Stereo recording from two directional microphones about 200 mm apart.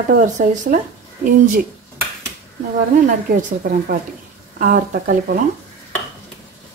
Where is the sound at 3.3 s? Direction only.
45° right (ahead or behind).